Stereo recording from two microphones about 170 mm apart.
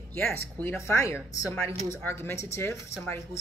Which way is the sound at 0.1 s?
15° left (ahead or behind).